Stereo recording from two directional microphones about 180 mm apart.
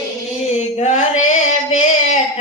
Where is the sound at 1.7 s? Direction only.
40° left (ahead or behind).